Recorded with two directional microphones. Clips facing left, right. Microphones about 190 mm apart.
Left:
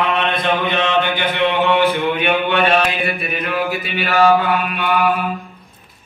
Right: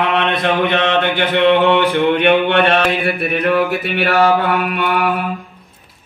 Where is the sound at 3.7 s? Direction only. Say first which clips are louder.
Right 3 dB; 65° right (ahead or behind).